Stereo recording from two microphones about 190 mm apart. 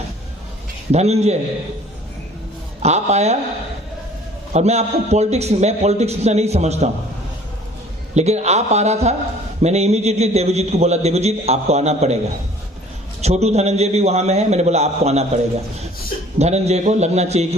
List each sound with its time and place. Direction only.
0.9 s a man's voice: 35° right (ahead or behind)
2.8 s a man's voice: 35° right (ahead or behind)
4.5 s a man's voice: 35° right (ahead or behind)
8.1 s a man's voice: 35° right (ahead or behind)
13.2 s a man's voice: 35° right (ahead or behind)
16.4 s a man's voice: 35° right (ahead or behind)